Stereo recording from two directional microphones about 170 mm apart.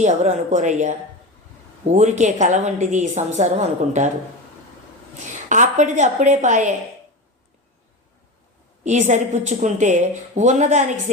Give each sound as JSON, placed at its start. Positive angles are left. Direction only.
{"t": 0.0, "sound": "a woman's voice", "side_deg": -45}
{"t": 5.5, "sound": "a woman's voice", "side_deg": -45}
{"t": 8.8, "sound": "a woman's voice", "side_deg": -45}